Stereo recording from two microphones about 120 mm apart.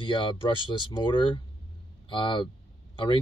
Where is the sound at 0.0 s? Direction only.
45° left (ahead or behind).